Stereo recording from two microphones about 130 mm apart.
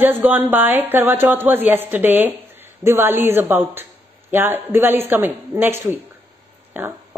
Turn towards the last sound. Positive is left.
turn(degrees=-15)  # may be behind; listen again after turning